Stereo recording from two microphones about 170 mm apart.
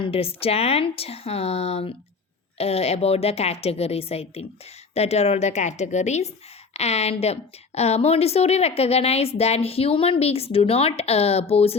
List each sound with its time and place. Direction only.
0.0 s a woman's voice: 35° left (ahead or behind)